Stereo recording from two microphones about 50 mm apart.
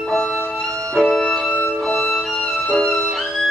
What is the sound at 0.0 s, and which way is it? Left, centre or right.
Music, centre.